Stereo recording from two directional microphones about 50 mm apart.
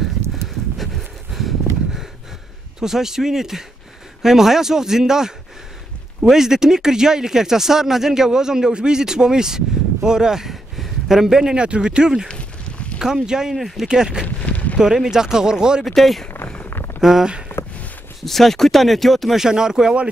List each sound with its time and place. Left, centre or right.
1.3 s a sound: centre
2.8 s a man's voice: centre
12.3 s a sound: left
13.0 s speech: centre
14.2 s a sound: left
14.8 s speech: centre
15.8 s speech: centre
17.0 s speech: centre
18.2 s speech: centre
19.4 s speech: centre